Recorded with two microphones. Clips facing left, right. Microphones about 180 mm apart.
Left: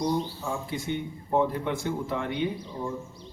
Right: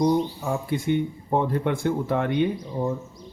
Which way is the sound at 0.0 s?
55° right (ahead or behind).